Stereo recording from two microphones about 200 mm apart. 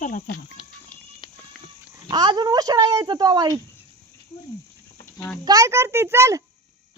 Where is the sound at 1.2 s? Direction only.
25° left (ahead or behind).